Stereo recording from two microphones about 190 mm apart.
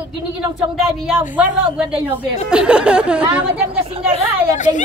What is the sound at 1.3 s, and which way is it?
Speech, 5° right (ahead or behind).